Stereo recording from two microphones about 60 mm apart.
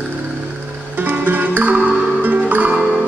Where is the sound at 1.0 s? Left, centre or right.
Right.